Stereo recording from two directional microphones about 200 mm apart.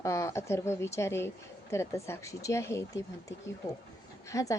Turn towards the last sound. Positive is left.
turn(degrees=15)  # may be behind; listen again after turning